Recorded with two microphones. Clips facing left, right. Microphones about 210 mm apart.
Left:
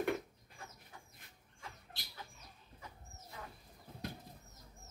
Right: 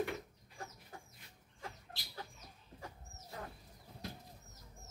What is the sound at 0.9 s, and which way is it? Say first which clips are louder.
Chicken: right 5 dB; 45° right (ahead or behind).